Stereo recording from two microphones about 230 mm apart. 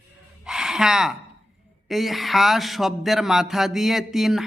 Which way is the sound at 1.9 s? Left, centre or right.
Centre.